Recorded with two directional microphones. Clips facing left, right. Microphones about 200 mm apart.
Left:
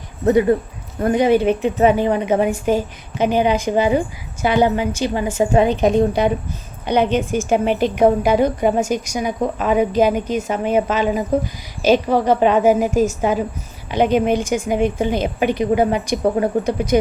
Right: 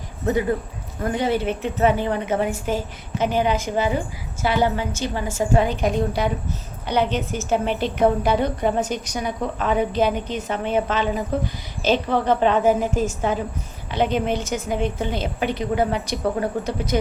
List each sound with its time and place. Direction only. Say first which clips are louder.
1.1 s a woman's voice: left 8 dB; 15° left (ahead or behind)